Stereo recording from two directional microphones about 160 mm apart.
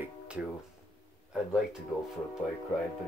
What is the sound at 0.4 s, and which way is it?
Speech, 10° right (ahead or behind).